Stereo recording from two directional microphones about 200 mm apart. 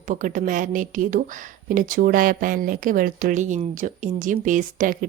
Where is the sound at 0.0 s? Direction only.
40° right (ahead or behind).